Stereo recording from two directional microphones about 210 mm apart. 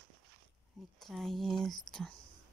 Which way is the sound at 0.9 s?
Centre (ahead or behind).